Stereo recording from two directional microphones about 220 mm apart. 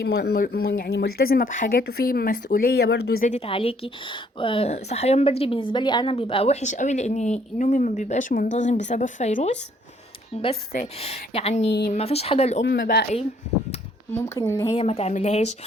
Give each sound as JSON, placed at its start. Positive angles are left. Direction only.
{"t": 0.0, "sound": "a woman's voice", "side_deg": 45}
{"t": 10.7, "sound": "speech", "side_deg": 30}
{"t": 12.6, "sound": "speech", "side_deg": 45}
{"t": 14.1, "sound": "a woman's voice", "side_deg": 10}
{"t": 14.7, "sound": "speech", "side_deg": 25}